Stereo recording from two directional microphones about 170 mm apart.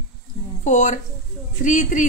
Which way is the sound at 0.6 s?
50° left (ahead or behind).